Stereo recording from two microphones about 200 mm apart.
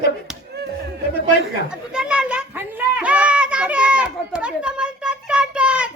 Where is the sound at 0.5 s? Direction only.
55° right (ahead or behind).